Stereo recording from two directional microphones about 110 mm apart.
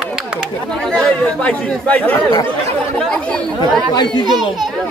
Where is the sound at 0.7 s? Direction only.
5° left (ahead or behind).